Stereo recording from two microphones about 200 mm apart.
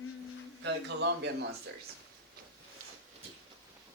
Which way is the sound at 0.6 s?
60° right (ahead or behind).